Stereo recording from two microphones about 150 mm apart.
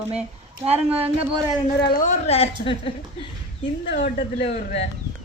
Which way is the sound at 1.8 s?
80° left.